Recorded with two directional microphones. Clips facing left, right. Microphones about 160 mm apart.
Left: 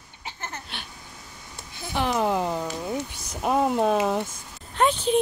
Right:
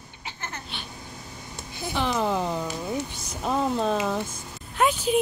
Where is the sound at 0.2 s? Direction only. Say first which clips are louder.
Left 1 dB; 45° left (ahead or behind).